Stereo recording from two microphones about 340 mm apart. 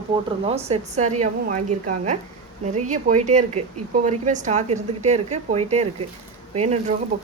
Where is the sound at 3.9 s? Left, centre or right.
Right.